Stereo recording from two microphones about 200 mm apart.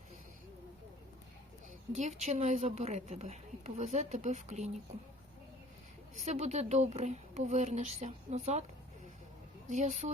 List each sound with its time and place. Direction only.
2.0 s a woman's voice: 35° right (ahead or behind)
6.1 s a woman's voice: 35° right (ahead or behind)
9.6 s a woman's voice: 40° right (ahead or behind)